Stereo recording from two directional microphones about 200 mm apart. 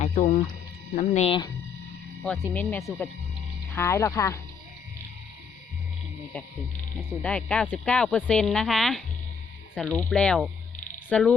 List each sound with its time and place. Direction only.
0.0 s music: 40° left (ahead or behind)
0.9 s speech: 35° left (ahead or behind)
2.2 s speech: 5° left (ahead or behind)
6.3 s speech: 5° left (ahead or behind)